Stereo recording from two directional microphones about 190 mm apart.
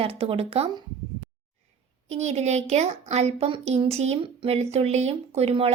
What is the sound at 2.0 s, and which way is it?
A woman's voice, 35° right (ahead or behind).